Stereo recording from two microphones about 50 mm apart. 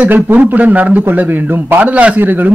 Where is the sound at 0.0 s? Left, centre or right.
Right.